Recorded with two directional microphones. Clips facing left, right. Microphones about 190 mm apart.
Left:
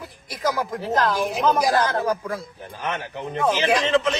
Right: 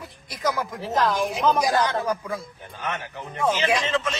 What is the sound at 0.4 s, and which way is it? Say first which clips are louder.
Speech: left 2 dB; centre (ahead or behind).